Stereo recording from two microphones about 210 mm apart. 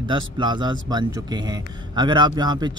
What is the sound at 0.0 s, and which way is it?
A man's voice, 20° right (ahead or behind).